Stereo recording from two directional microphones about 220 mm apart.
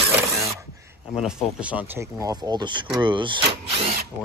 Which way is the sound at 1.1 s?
5° right (ahead or behind).